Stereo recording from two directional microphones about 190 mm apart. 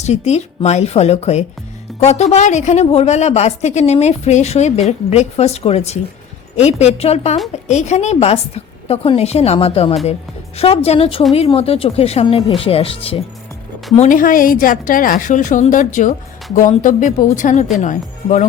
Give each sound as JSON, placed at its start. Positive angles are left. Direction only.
{"t": 0.0, "sound": "a woman's voice", "side_deg": 35}
{"t": 14.0, "sound": "a woman's voice", "side_deg": 45}